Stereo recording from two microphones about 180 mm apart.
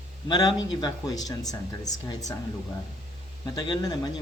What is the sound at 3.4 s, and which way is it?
Speech, 20° left (ahead or behind).